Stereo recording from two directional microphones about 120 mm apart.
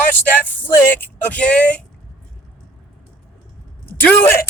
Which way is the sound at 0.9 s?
15° left (ahead or behind).